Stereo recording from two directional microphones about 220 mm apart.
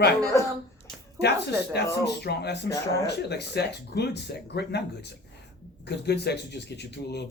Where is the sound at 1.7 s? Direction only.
50° left (ahead or behind).